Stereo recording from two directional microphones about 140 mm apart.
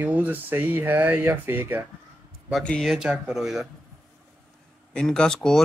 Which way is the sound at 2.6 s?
5° left (ahead or behind).